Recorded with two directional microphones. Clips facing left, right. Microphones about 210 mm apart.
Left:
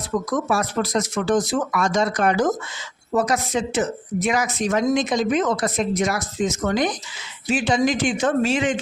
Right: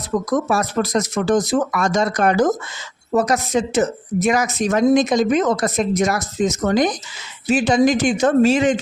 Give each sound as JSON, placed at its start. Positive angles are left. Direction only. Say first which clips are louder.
{"t": 0.3, "sound": "speech", "louder": "right 4 dB", "side_deg": -40}